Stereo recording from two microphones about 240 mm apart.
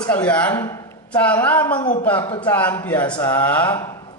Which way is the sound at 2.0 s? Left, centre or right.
Centre.